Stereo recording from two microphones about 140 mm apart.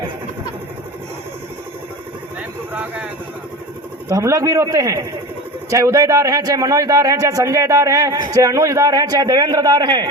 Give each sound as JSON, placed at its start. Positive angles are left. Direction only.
{"t": 2.7, "sound": "speech", "side_deg": -10}
{"t": 4.1, "sound": "a man's voice", "side_deg": -20}